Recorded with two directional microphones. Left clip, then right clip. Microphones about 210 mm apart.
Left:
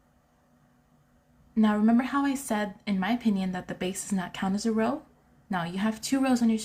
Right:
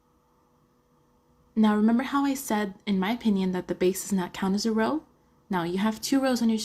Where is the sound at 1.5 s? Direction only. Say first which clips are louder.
Right 1 dB; 20° right (ahead or behind).